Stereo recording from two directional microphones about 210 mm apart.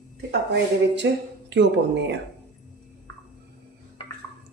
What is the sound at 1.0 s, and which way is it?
Speech, 60° right (ahead or behind).